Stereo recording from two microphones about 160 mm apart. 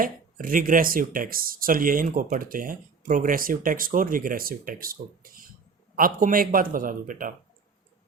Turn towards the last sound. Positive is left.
turn(degrees=-60)  # may be behind; listen again after turning